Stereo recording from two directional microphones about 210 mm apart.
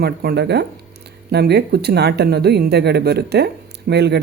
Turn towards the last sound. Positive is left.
turn(degrees=-55)  # may be behind; listen again after turning